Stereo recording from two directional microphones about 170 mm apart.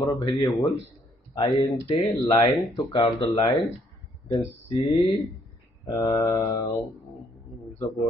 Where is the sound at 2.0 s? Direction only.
20° left (ahead or behind).